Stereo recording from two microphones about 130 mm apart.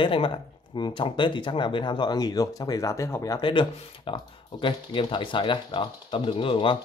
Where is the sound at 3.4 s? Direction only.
40° left (ahead or behind).